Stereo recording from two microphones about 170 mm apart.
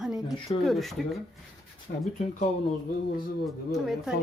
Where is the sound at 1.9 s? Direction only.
65° left (ahead or behind).